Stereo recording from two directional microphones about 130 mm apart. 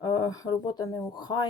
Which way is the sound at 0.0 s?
30° left (ahead or behind).